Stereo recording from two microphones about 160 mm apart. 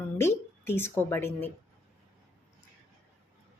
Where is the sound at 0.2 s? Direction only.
15° left (ahead or behind).